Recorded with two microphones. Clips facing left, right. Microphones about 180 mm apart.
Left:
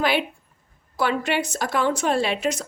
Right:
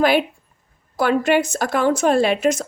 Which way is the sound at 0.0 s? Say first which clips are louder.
Right 6 dB; 45° right (ahead or behind).